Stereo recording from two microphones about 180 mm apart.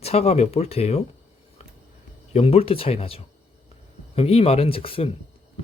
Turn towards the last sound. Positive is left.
turn(degrees=30)  # may be behind; listen again after turning